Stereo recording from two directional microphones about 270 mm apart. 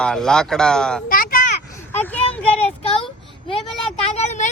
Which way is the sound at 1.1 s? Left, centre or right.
Left.